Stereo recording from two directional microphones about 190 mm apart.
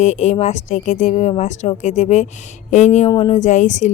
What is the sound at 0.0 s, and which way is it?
Speech, 40° left (ahead or behind).